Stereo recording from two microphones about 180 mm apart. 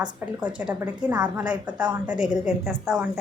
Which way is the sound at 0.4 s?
10° right (ahead or behind).